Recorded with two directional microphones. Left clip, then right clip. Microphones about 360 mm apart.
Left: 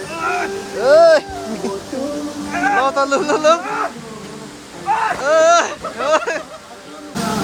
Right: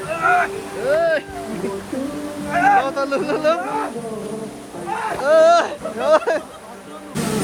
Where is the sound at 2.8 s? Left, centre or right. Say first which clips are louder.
Left 5 dB; centre.